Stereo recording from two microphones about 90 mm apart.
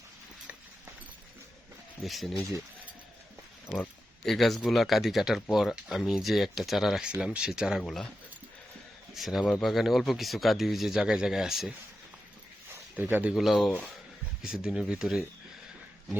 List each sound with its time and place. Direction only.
2.0 s speech: centre (ahead or behind)
3.8 s speech: 5° left (ahead or behind)
9.1 s speech: centre (ahead or behind)
13.0 s a man's voice: 20° right (ahead or behind)
13.3 s speech: centre (ahead or behind)
13.7 s speech: 15° left (ahead or behind)
14.4 s speech: 5° right (ahead or behind)